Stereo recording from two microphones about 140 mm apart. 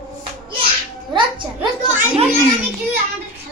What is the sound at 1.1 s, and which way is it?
Speech, 35° right (ahead or behind).